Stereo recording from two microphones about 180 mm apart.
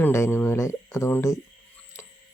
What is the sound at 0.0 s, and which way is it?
Speech, 15° left (ahead or behind).